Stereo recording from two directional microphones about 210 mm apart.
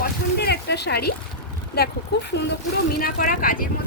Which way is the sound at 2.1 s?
50° left (ahead or behind).